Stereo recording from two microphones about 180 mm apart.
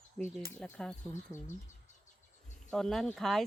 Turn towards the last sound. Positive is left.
turn(degrees=0)  # may be behind; listen again after turning